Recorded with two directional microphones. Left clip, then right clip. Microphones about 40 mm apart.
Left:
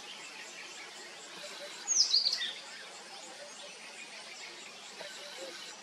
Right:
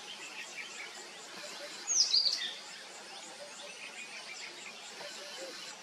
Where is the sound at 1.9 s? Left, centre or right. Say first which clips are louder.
Even; left.